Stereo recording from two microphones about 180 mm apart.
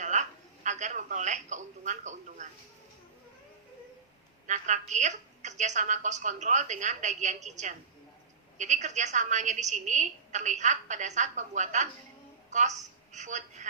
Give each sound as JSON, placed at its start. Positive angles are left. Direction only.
{"t": 0.0, "sound": "telephone", "side_deg": -45}
{"t": 4.4, "sound": "a woman's voice", "side_deg": -40}